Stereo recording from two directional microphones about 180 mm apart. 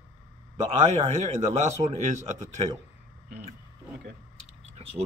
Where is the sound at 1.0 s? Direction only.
40° right (ahead or behind).